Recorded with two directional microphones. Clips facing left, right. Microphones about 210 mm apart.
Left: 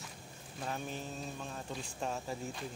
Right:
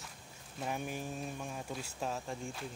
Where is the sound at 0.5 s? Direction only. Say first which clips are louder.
Right 2 dB; 10° right (ahead or behind).